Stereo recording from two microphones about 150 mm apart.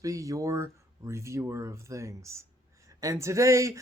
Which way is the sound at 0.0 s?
20° right (ahead or behind).